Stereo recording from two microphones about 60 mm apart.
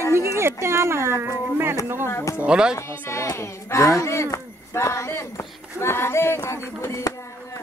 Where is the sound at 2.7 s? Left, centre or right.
Left.